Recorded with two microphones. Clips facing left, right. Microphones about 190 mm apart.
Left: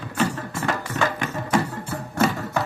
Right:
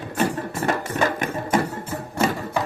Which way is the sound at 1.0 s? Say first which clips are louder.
Right 2 dB; 50° right (ahead or behind).